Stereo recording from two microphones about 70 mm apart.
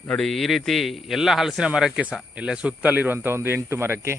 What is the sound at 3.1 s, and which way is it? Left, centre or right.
Speech, right.